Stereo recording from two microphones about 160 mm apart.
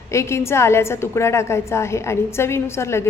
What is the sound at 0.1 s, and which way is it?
A woman's voice, 15° left (ahead or behind).